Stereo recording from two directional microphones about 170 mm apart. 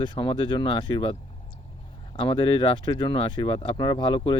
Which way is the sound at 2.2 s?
30° left (ahead or behind).